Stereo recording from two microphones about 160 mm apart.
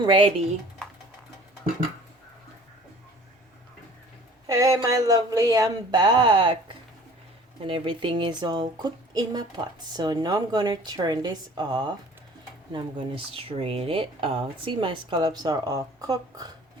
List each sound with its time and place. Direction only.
0.0 s speech: 30° right (ahead or behind)
4.4 s speech: 20° right (ahead or behind)
7.6 s speech: 35° right (ahead or behind)